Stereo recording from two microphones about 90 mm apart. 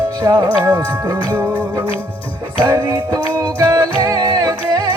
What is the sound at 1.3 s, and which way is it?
Music, 20° right (ahead or behind).